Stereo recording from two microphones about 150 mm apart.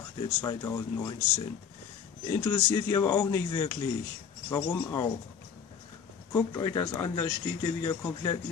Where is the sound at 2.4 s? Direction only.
25° left (ahead or behind).